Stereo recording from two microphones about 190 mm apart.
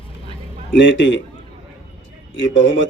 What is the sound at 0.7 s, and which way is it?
Speech, 75° left (ahead or behind).